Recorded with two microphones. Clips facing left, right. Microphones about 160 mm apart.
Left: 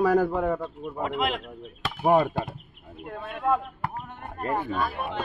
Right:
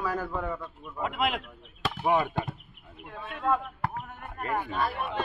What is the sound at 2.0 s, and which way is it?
Speech, 35° left (ahead or behind).